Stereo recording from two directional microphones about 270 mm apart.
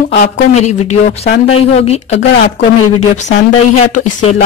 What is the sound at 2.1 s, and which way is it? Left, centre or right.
Speech, left.